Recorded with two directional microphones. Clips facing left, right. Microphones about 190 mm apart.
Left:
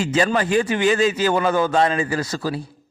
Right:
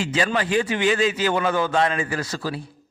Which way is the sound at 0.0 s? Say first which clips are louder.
Left 4 dB; 45° left (ahead or behind).